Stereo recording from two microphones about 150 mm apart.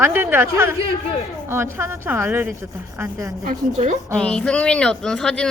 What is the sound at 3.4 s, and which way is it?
Speech, 60° right (ahead or behind).